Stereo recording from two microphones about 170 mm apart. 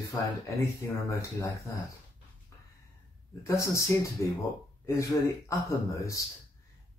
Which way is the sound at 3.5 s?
15° left (ahead or behind).